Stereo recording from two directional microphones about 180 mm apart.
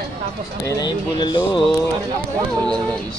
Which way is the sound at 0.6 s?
20° left (ahead or behind).